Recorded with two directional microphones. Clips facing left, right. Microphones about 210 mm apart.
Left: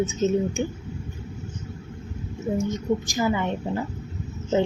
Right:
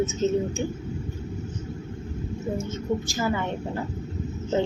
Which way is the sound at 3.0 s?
15° left (ahead or behind).